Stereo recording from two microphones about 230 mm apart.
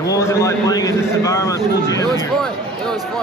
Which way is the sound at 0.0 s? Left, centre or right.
Centre.